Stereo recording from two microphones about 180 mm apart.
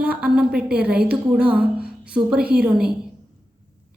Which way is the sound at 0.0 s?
5° right (ahead or behind).